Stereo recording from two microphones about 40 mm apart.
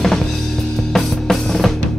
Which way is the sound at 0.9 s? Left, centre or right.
Centre.